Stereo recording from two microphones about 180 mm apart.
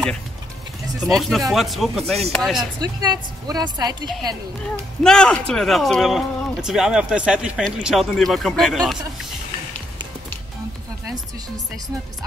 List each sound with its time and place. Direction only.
1.0 s speech: centre (ahead or behind)
2.8 s speech: 20° right (ahead or behind)
5.0 s speech: 5° left (ahead or behind)